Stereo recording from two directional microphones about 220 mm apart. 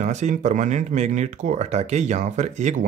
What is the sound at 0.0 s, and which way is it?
Speech, 35° right (ahead or behind).